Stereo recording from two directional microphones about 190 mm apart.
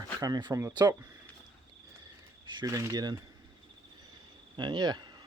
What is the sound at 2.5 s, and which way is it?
Speech, 20° right (ahead or behind).